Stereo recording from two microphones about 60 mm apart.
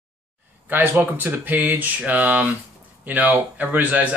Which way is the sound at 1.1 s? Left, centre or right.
Right.